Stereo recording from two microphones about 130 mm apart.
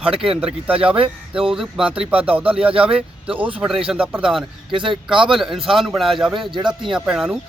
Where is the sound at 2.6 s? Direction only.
45° right (ahead or behind).